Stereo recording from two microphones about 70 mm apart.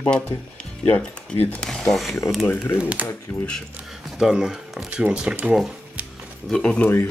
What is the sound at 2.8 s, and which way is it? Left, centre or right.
Speech, centre.